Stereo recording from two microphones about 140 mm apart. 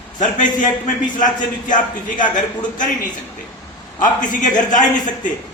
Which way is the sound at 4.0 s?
65° left (ahead or behind).